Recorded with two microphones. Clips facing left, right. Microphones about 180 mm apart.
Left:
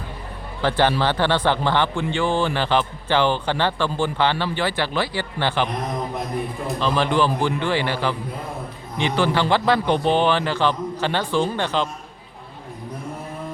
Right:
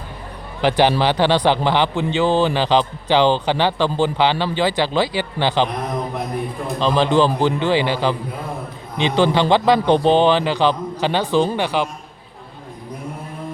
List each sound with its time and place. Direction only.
0.6 s a man's voice: 15° right (ahead or behind)
6.7 s a man's voice: 25° right (ahead or behind)